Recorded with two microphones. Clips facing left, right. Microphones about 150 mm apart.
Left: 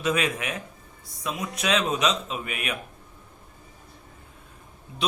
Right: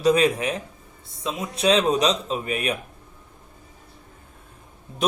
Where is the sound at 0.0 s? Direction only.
35° right (ahead or behind).